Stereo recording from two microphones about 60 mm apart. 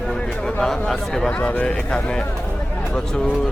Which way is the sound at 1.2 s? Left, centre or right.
Left.